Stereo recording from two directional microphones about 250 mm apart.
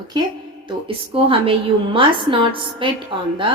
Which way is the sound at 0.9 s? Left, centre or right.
Right.